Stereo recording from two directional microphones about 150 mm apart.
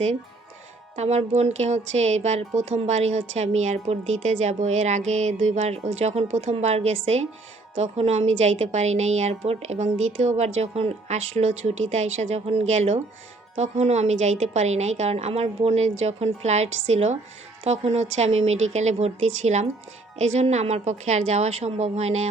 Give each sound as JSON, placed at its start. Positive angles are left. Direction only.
{"t": 0.9, "sound": "a woman's voice", "side_deg": -45}